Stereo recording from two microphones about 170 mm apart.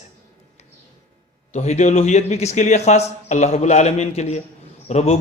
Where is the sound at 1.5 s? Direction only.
40° left (ahead or behind).